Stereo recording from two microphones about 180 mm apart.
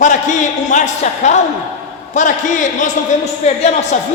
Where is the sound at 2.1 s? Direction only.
45° left (ahead or behind).